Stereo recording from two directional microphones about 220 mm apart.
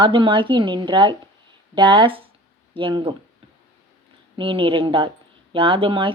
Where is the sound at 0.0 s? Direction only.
20° right (ahead or behind).